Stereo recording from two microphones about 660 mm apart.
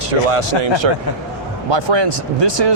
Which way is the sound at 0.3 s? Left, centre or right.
Right.